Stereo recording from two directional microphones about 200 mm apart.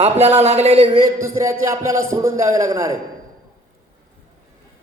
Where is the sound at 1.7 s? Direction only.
15° right (ahead or behind).